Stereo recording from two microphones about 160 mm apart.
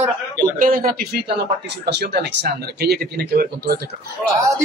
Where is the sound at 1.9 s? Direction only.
90° right.